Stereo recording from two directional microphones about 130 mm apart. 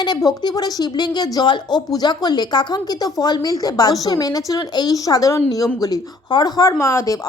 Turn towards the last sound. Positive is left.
turn(degrees=25)  # may be behind; listen again after turning